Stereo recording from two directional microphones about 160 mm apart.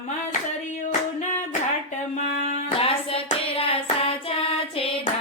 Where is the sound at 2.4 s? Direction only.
35° left (ahead or behind).